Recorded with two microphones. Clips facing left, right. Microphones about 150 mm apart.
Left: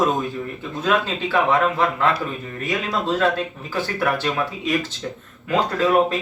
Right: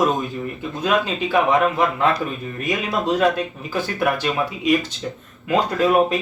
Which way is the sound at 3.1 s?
15° right (ahead or behind).